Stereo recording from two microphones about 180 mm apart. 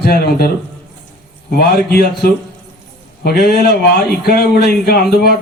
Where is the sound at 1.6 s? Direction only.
60° left (ahead or behind).